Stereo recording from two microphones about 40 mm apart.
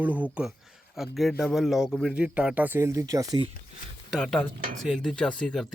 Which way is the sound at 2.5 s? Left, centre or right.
Right.